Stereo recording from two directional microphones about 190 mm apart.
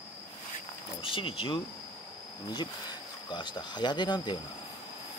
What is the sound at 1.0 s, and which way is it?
Speech, 25° left (ahead or behind).